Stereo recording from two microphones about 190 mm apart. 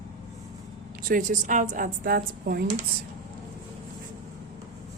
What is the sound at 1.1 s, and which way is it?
A woman's voice, 40° right (ahead or behind).